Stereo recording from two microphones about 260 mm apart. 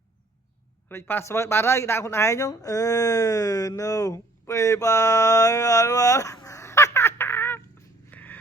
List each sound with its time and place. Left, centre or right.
0.9 s speech: centre